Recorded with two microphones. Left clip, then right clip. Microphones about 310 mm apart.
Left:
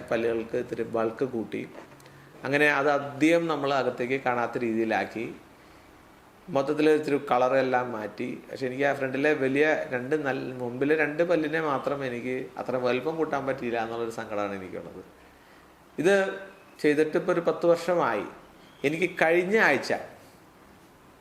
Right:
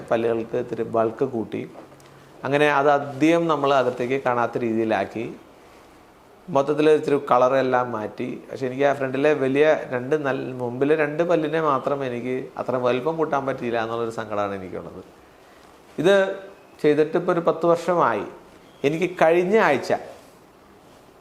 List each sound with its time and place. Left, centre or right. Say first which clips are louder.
0.1 s a man's voice: right 5 dB; centre
6.5 s a man's voice: right 5 dB; centre
16.0 s a man's voice: right 5 dB; centre